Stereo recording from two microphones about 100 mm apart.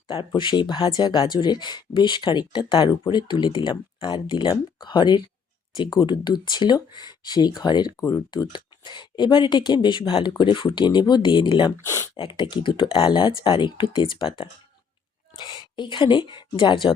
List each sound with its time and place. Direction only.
0.3 s speech: 55° left (ahead or behind)